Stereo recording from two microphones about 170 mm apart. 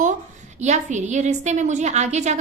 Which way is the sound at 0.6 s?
45° right (ahead or behind).